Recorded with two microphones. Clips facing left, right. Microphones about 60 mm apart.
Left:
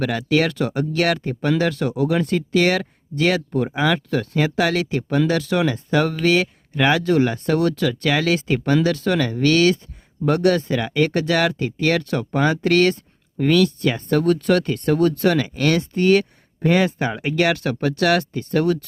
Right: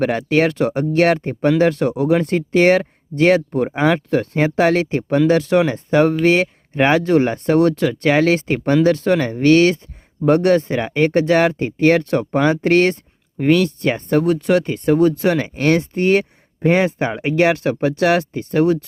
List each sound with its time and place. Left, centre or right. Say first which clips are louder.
0.0 s speech: right 3 dB; right